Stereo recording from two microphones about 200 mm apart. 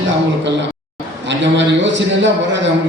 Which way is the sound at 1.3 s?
65° right (ahead or behind).